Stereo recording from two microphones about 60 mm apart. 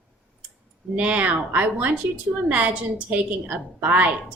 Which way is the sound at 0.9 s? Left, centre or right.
Right.